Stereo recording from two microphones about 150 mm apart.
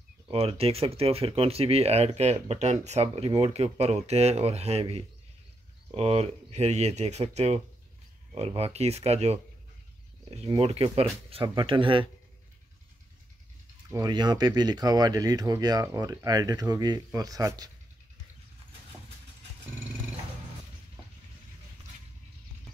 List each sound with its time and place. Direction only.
0.3 s speech: 40° right (ahead or behind)
10.6 s speech: 40° right (ahead or behind)
13.8 s speech: 25° right (ahead or behind)